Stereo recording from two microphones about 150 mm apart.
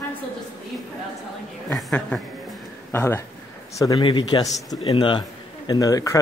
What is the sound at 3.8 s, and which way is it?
A man's voice, 25° left (ahead or behind).